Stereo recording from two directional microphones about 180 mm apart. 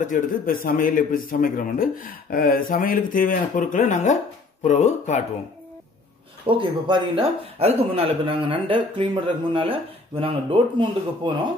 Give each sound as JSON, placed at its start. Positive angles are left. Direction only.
{"t": 0.0, "sound": "speech", "side_deg": 45}
{"t": 6.4, "sound": "speech", "side_deg": -30}